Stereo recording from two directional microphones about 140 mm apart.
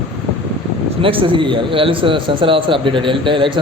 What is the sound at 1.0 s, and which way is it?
Speech, 40° right (ahead or behind).